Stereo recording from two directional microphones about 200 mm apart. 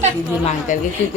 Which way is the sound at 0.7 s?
40° left (ahead or behind).